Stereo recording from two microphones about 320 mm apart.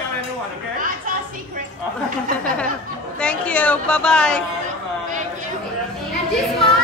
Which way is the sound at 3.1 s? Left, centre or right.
Centre.